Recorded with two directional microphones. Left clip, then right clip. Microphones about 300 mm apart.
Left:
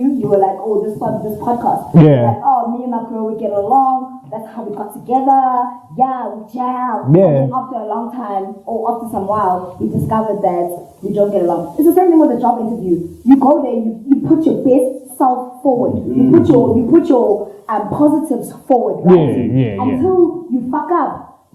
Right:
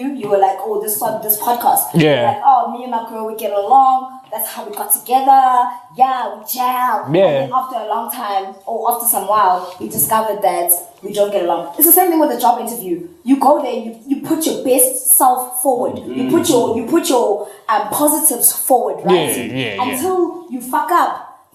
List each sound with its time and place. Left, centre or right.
0.0 s a woman's voice: centre
15.2 s a woman's voice: centre
15.9 s speech: centre
17.2 s a woman's voice: centre
17.7 s speech: centre